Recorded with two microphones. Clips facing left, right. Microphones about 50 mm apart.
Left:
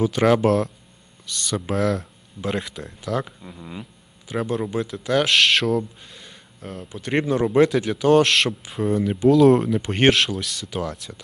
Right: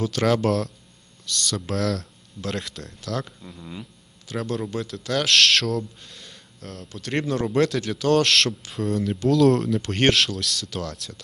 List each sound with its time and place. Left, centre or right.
0.0 s speech: centre